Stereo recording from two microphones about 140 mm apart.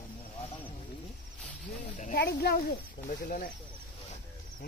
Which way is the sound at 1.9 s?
65° left (ahead or behind).